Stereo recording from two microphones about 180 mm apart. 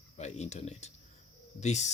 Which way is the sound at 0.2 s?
40° left (ahead or behind).